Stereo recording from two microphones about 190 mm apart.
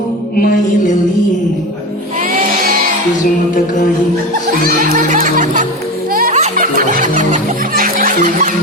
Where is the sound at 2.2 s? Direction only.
50° right (ahead or behind).